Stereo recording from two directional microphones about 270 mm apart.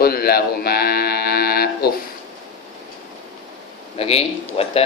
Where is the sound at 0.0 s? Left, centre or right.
Left.